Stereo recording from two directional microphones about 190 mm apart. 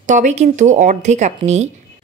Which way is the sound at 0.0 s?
40° right (ahead or behind).